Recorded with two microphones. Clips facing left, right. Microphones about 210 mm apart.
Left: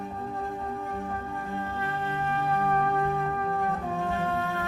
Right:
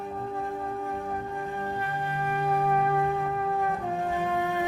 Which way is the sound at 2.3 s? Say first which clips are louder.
Right 2 dB; 10° right (ahead or behind).